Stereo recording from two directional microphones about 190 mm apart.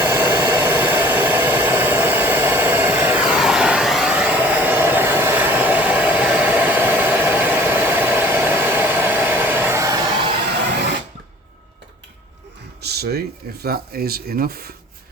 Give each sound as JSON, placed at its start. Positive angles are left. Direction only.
{"t": 0.0, "sound": "hair dryer", "side_deg": -10}
{"t": 12.8, "sound": "speech", "side_deg": -55}